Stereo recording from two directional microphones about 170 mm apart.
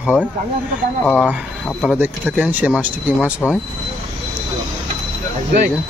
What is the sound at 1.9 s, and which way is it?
Speech, 10° right (ahead or behind).